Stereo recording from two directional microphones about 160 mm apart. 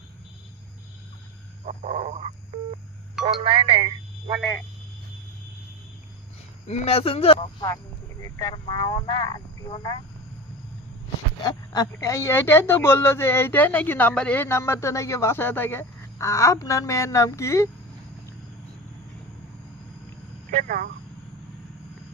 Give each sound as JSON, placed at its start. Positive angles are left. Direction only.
{"t": 1.6, "sound": "a sound", "side_deg": -55}
{"t": 3.2, "sound": "speech", "side_deg": -35}
{"t": 6.7, "sound": "speech", "side_deg": 40}
{"t": 8.4, "sound": "speech", "side_deg": 25}
{"t": 11.4, "sound": "speech", "side_deg": 25}
{"t": 20.6, "sound": "speech", "side_deg": -65}